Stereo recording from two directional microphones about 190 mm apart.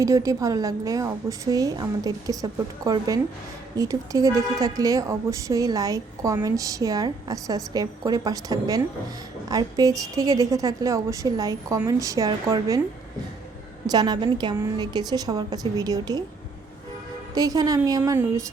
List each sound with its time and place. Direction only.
0.0 s speech: 15° right (ahead or behind)
13.8 s a woman's voice: 20° right (ahead or behind)
17.3 s a woman's voice: 20° right (ahead or behind)